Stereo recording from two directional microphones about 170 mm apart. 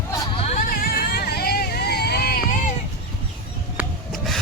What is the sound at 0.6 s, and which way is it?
Hubbub, 55° left (ahead or behind).